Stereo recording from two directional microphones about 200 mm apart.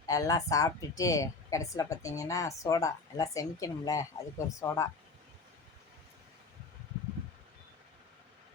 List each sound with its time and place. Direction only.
0.0 s speech: 15° left (ahead or behind)